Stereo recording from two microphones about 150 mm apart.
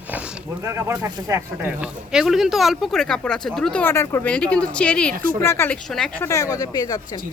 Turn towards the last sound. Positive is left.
turn(degrees=25)  # may be behind; listen again after turning